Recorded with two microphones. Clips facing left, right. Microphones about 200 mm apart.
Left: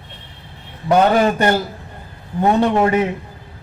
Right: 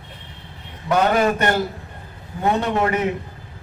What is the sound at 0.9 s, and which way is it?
Speech, 35° left (ahead or behind).